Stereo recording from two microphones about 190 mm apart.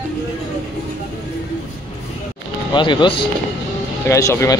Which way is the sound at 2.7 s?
25° left (ahead or behind).